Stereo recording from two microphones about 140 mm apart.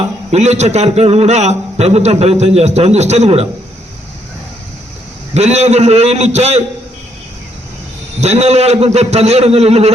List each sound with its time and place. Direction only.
0.3 s a man's voice: 50° right (ahead or behind)
5.3 s a man's voice: 50° right (ahead or behind)
8.2 s a man's voice: 50° right (ahead or behind)